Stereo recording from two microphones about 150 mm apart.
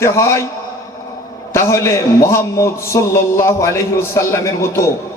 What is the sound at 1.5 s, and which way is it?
A man's voice, 20° left (ahead or behind).